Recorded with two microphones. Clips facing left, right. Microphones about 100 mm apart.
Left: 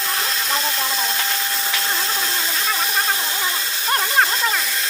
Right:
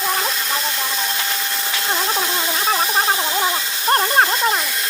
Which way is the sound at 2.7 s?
40° right (ahead or behind).